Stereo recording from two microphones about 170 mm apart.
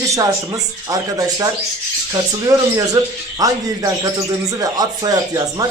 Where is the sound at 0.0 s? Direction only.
20° right (ahead or behind).